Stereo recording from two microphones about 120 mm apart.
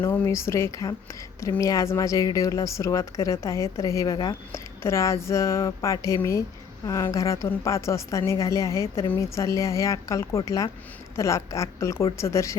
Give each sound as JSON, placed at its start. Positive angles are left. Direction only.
{"t": 0.0, "sound": "speech", "side_deg": 25}
{"t": 4.5, "sound": "speech", "side_deg": 25}